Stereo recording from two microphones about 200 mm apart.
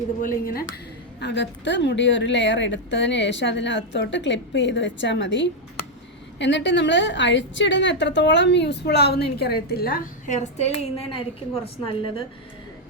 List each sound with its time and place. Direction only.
0.2 s a woman's voice: 45° left (ahead or behind)
1.2 s a woman's voice: 60° left (ahead or behind); by 12.2 s 30° left (ahead or behind)